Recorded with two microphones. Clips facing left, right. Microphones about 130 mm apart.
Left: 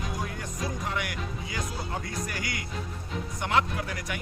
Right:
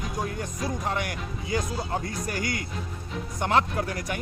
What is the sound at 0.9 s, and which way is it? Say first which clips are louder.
Speech: right 3 dB; 40° right (ahead or behind).